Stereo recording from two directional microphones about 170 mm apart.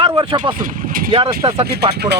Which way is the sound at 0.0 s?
35° right (ahead or behind).